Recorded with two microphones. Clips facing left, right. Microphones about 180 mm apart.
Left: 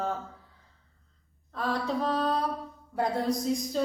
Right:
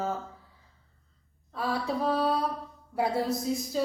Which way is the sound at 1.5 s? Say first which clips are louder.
Even; 10° right (ahead or behind).